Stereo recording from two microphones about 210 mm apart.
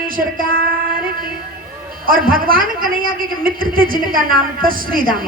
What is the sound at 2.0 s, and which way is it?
A man's voice, 40° right (ahead or behind).